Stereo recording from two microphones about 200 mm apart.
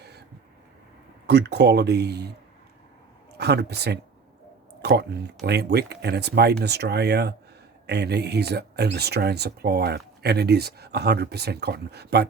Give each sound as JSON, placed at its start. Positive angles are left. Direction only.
{"t": 0.0, "sound": "a sound", "side_deg": -55}
{"t": 1.3, "sound": "speech", "side_deg": -55}
{"t": 3.3, "sound": "speech", "side_deg": -55}